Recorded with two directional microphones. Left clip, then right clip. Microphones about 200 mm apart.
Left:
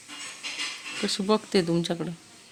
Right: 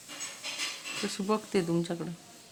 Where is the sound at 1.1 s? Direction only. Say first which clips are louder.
Left 7 dB; 25° left (ahead or behind).